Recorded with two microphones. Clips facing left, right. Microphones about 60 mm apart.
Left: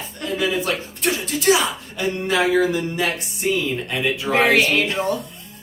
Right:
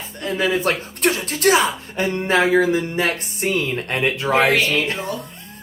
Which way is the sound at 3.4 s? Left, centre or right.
Right.